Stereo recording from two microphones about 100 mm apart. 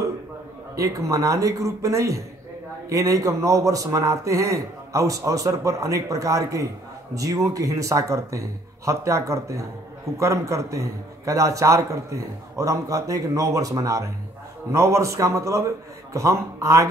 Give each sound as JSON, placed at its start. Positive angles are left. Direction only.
{"t": 0.7, "sound": "a man's voice", "side_deg": -35}